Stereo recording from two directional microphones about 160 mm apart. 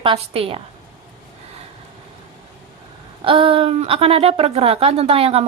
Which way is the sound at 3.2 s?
35° right (ahead or behind).